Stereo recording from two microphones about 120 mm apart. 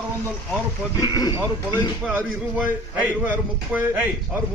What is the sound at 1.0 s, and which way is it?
Speech, 35° left (ahead or behind).